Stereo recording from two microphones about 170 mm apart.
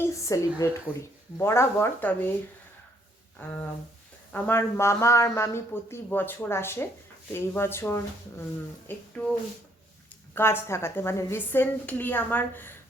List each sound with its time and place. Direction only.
0.0 s a woman's voice: 20° left (ahead or behind)
4.3 s speech: 10° left (ahead or behind)
10.3 s speech: 15° left (ahead or behind)